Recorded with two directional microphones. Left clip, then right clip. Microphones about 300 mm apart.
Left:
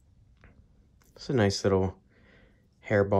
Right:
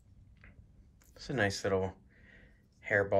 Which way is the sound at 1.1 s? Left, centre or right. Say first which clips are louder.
Left 6 dB; left.